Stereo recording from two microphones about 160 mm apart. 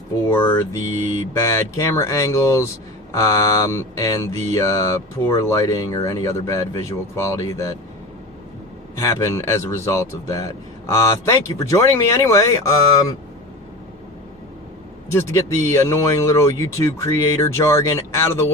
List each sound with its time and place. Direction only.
0.3 s speech: 15° left (ahead or behind)
1.4 s mantra: 15° left (ahead or behind)
9.0 s speech: 15° left (ahead or behind)
15.1 s speech: 15° left (ahead or behind)